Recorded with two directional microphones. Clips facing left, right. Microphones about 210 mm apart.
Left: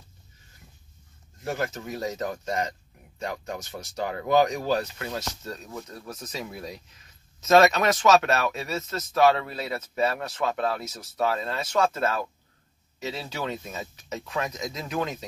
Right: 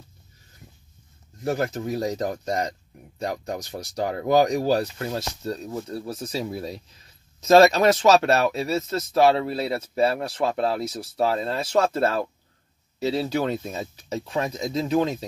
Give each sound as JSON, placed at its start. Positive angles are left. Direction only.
{"t": 1.4, "sound": "speech", "side_deg": -35}